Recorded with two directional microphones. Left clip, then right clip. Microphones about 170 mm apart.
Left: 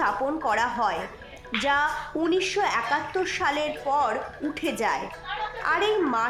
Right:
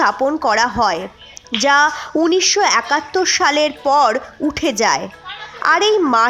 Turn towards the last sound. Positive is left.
turn(degrees=-50)  # may be behind; listen again after turning